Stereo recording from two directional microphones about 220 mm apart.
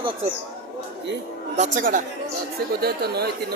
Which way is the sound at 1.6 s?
35° right (ahead or behind).